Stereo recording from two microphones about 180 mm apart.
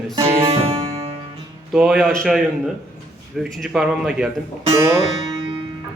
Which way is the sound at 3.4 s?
Centre (ahead or behind).